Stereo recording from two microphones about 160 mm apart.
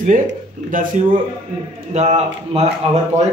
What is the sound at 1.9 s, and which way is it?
Speech, 45° right (ahead or behind).